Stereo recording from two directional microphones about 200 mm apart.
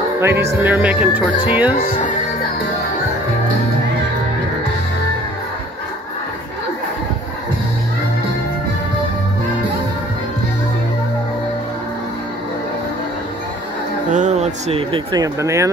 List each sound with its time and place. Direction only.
0.2 s speech: 15° right (ahead or behind)
1.8 s music: 35° left (ahead or behind)
14.1 s a sound: 35° right (ahead or behind)
15.1 s speech: 15° right (ahead or behind)